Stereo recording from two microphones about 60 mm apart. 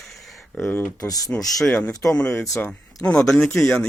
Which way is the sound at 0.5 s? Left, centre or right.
Left.